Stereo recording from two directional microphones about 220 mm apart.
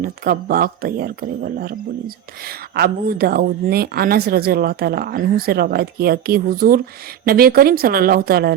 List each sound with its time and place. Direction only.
0.0 s speech: 40° right (ahead or behind)